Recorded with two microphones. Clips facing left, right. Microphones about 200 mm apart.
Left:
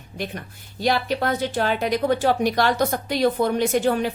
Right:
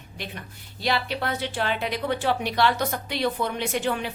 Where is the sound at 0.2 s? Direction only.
45° left (ahead or behind).